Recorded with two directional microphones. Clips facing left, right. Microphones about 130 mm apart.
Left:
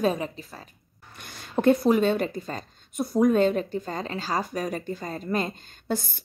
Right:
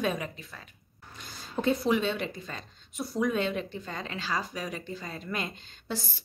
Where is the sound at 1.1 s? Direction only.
65° left (ahead or behind).